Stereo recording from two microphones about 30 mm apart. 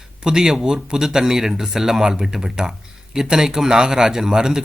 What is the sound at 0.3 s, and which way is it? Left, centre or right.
Speech, right.